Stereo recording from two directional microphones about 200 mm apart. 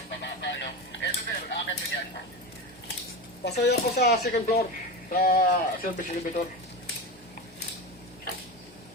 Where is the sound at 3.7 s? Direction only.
55° left (ahead or behind).